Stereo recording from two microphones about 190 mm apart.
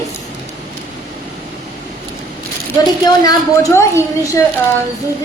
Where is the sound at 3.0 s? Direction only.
20° left (ahead or behind).